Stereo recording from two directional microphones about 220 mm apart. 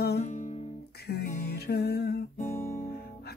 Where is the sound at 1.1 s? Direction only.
45° left (ahead or behind).